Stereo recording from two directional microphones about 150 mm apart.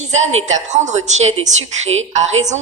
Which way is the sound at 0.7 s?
50° right (ahead or behind).